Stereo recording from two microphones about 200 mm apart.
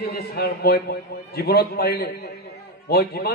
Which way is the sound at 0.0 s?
50° left (ahead or behind).